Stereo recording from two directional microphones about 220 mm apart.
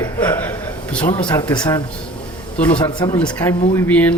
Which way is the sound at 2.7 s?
20° left (ahead or behind).